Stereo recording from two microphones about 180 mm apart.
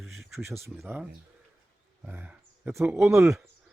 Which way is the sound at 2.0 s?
10° right (ahead or behind).